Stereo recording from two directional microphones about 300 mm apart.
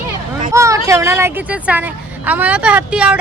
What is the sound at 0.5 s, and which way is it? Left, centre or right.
A woman's voice, centre.